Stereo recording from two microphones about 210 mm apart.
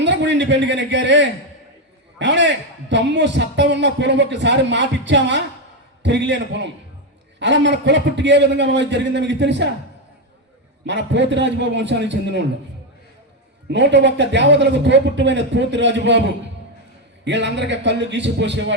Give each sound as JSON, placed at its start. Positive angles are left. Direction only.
{"t": 0.0, "sound": "a man's voice", "side_deg": -55}
{"t": 10.8, "sound": "a man's voice", "side_deg": -55}
{"t": 13.7, "sound": "a man's voice", "side_deg": -55}